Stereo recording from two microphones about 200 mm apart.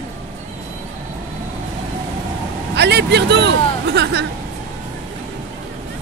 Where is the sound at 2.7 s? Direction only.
60° right (ahead or behind).